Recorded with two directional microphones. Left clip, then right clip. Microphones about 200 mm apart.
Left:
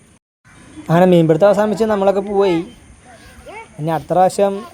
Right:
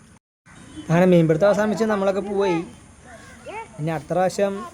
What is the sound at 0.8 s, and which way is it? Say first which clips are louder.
Speech: left 5 dB; 20° left (ahead or behind).